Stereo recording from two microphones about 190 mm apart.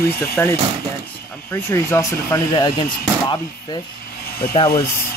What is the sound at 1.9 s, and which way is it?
Speech, 15° left (ahead or behind).